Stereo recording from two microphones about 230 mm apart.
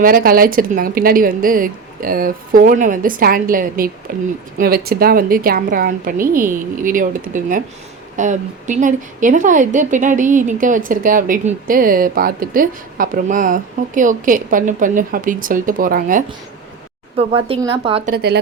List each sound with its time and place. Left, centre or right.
0.0 s speech: right
17.2 s a woman's voice: right
18.1 s speech: right